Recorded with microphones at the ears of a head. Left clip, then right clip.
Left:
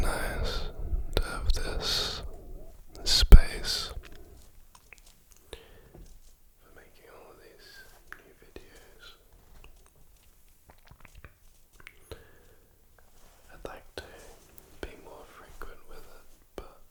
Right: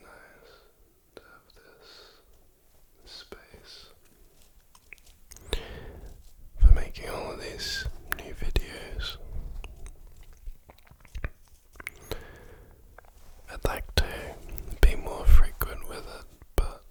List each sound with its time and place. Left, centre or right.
0.0 s whispering: left
5.3 s a sound: right
6.6 s whispering: right
11.8 s chewing: right
13.5 s whispering: right